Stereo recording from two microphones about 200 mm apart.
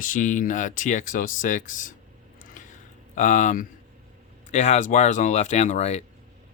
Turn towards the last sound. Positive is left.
turn(degrees=35)  # may be behind; listen again after turning